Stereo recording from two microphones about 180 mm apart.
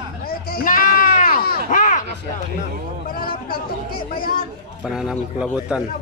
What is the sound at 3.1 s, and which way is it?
Speech, 55° left (ahead or behind).